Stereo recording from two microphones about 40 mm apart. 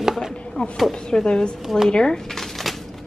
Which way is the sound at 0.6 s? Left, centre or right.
Left.